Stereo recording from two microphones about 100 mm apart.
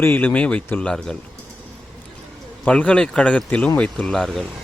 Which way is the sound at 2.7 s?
10° left (ahead or behind).